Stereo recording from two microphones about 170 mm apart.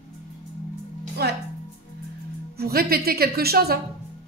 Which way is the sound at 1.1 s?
70° right (ahead or behind).